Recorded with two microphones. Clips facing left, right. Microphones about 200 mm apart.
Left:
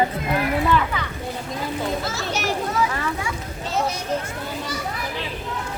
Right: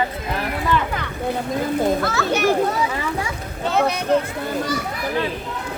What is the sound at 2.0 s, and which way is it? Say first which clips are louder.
Speech: right 7 dB; 60° right (ahead or behind).